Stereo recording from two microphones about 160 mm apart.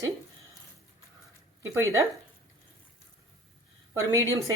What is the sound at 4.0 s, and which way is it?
Speech, 20° right (ahead or behind).